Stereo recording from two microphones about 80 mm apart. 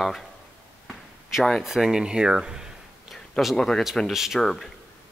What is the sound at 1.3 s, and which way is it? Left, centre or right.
Speech, centre.